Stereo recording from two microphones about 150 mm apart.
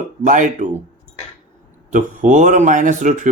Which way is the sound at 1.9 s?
55° right (ahead or behind).